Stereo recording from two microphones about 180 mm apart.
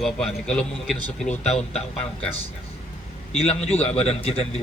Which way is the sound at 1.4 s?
35° left (ahead or behind).